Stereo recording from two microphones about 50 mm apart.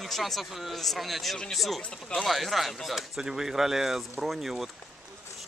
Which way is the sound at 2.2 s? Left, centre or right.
Centre.